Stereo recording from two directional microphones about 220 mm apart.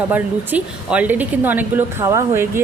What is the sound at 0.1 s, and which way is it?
Speech, 5° right (ahead or behind).